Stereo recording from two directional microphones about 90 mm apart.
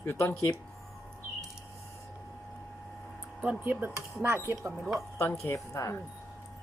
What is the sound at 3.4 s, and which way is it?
Speech, 15° right (ahead or behind).